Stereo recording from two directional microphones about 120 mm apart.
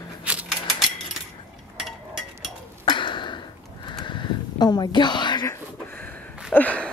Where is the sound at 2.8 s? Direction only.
45° left (ahead or behind).